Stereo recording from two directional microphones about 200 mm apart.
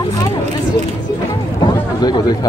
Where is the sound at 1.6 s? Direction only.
20° left (ahead or behind).